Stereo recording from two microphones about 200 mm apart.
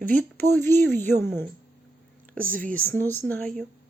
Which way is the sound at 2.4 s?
45° right (ahead or behind).